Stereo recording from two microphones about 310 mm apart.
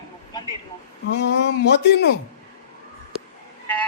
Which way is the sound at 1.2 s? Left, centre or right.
Left.